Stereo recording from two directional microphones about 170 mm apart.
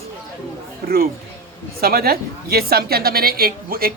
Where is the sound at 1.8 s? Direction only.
60° right (ahead or behind).